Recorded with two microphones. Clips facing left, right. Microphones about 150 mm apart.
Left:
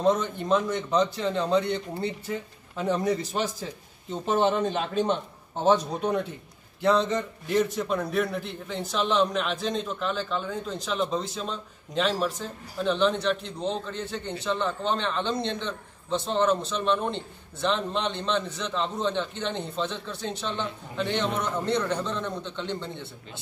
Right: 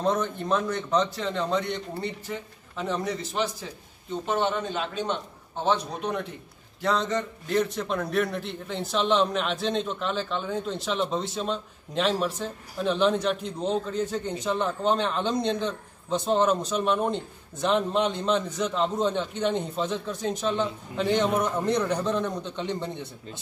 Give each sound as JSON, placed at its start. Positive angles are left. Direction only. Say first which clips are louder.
{"t": 0.0, "sound": "a man's voice", "louder": "left 2 dB", "side_deg": 20}
{"t": 4.4, "sound": "a man's voice", "louder": "left 5 dB", "side_deg": 40}
{"t": 5.7, "sound": "a man's voice", "louder": "left 4 dB", "side_deg": 35}
{"t": 6.8, "sound": "a man's voice", "louder": "left 3 dB", "side_deg": 20}
{"t": 7.5, "sound": "a man's voice", "louder": "left 1 dB", "side_deg": 0}